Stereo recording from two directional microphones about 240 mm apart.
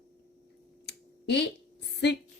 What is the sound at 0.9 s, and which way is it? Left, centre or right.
Computer keyboard, left.